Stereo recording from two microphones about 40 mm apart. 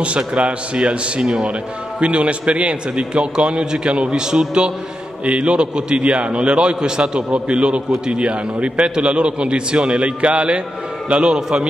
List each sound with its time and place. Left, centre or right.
0.3 s a man's voice: right